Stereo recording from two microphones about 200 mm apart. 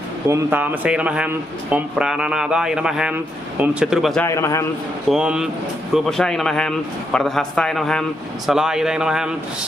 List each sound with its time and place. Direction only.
0.3 s a man's voice: 10° right (ahead or behind)
4.3 s a man's voice: 15° left (ahead or behind)
5.0 s a man's voice: 5° right (ahead or behind)